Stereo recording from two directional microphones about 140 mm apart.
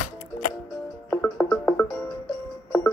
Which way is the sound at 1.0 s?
15° left (ahead or behind).